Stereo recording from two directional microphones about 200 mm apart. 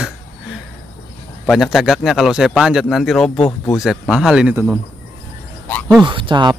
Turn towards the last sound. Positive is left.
turn(degrees=-25)  # may be behind; listen again after turning